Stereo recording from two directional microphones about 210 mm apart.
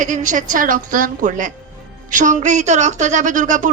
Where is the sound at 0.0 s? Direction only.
40° right (ahead or behind).